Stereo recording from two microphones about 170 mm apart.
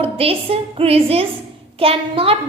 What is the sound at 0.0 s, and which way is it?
A woman's voice, 35° right (ahead or behind).